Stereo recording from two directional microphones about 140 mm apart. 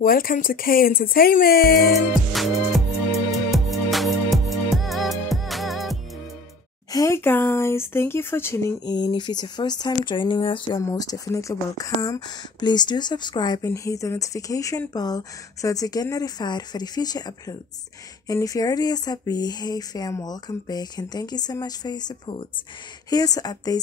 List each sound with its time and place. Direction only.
0.0 s speech: 90° left
1.9 s music: centre (ahead or behind)
6.9 s speech: 25° left (ahead or behind)
8.8 s speech: 30° left (ahead or behind)
10.8 s speech: 25° left (ahead or behind)